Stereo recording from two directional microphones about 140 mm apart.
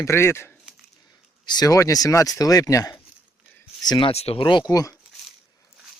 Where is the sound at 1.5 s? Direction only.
30° left (ahead or behind).